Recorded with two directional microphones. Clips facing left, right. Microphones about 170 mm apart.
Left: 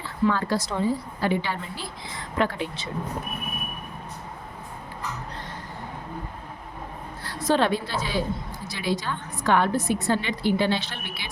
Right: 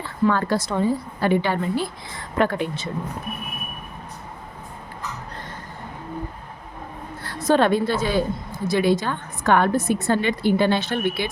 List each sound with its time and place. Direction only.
0.0 s a woman's voice: 55° right (ahead or behind)
7.4 s a woman's voice: 50° right (ahead or behind)